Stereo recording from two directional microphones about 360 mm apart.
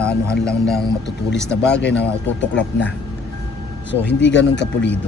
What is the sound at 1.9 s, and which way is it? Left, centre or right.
Speech, left.